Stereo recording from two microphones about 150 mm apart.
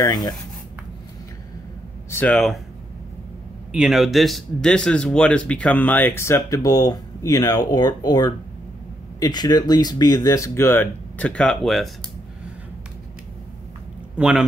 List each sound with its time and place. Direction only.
0.0 s speech: 25° left (ahead or behind)
2.0 s speech: 15° left (ahead or behind)
2.3 s speech: centre (ahead or behind)
3.7 s speech: 5° right (ahead or behind)
14.1 s a man's voice: 5° right (ahead or behind)